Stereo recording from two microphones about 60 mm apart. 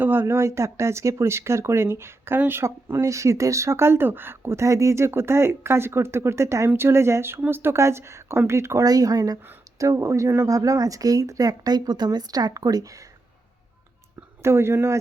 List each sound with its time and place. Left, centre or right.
0.0 s speech: right
8.8 s speech: right
9.7 s speech: right
14.4 s speech: right